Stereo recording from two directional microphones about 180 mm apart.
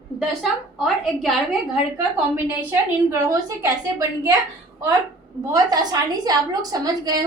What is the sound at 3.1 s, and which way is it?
A woman's voice, 20° right (ahead or behind).